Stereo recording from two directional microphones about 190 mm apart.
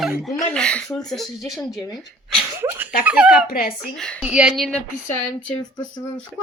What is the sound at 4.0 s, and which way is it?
Speech, 5° left (ahead or behind).